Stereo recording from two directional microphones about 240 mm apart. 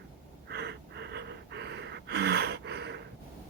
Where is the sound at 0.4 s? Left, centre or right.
Right.